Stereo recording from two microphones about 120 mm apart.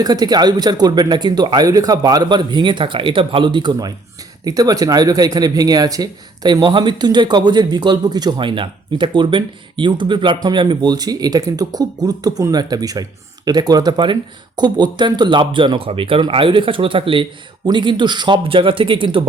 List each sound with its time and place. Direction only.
0.0 s speech: 35° right (ahead or behind)